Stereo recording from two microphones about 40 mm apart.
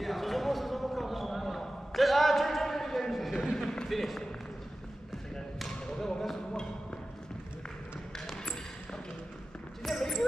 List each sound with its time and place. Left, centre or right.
0.0 s basketball bounce: centre
3.5 s run: centre
3.9 s a sound: centre
5.6 s thump: centre
9.9 s music: centre